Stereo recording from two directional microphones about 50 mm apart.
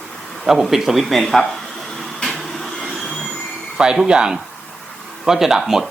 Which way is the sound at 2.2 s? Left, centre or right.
Centre.